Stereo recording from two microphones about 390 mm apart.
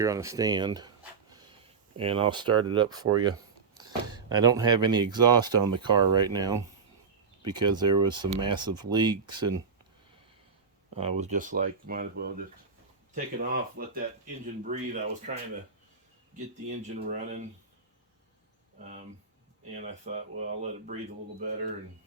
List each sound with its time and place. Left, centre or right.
0.0 s speech: centre
10.9 s speech: centre
16.9 s speech: centre
20.1 s speech: centre